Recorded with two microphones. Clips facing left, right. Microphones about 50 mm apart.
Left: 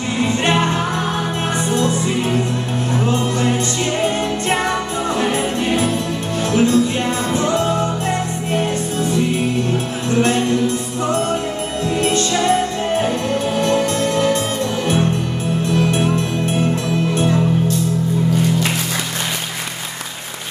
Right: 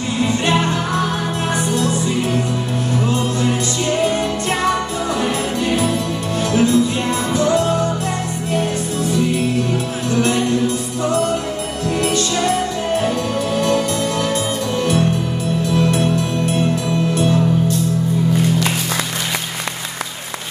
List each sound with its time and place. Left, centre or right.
4.0 s music: left
6.5 s music: left
10.1 s music: left
12.0 s music: left
13.7 s music: left